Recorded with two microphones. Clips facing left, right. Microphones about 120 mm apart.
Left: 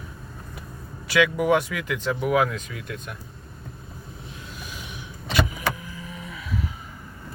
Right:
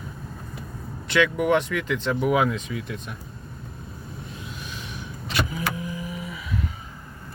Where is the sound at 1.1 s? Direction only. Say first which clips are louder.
Left 1 dB; 5° left (ahead or behind).